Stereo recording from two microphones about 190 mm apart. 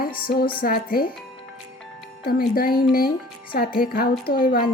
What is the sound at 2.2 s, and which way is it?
Speech, 50° left (ahead or behind).